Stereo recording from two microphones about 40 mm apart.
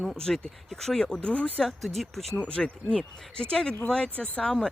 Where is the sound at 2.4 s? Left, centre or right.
Left.